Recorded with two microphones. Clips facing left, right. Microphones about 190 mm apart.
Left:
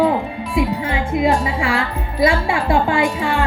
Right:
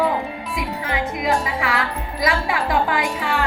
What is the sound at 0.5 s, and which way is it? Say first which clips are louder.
Speech: left 7 dB; 25° left (ahead or behind).